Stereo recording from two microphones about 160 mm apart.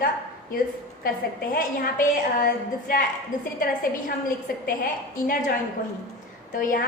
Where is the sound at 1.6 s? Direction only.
60° left (ahead or behind).